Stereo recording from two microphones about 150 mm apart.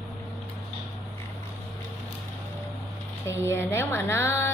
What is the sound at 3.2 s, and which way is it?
Speech, 15° left (ahead or behind).